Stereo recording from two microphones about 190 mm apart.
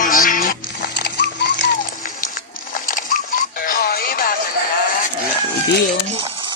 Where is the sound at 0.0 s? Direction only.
45° left (ahead or behind).